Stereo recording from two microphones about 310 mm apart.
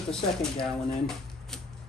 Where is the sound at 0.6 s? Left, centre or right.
Centre.